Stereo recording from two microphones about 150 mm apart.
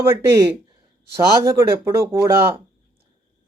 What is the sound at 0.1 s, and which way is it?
A man's voice, 20° right (ahead or behind).